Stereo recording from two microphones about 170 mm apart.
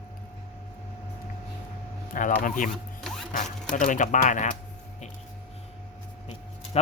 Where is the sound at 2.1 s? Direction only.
50° left (ahead or behind).